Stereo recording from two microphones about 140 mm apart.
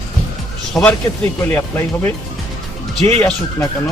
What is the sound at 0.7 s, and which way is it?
Speech, 5° left (ahead or behind).